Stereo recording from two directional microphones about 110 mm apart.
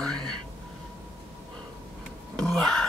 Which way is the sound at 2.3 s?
5° left (ahead or behind).